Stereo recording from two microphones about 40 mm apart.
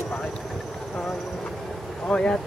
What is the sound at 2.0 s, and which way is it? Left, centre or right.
Speech, left.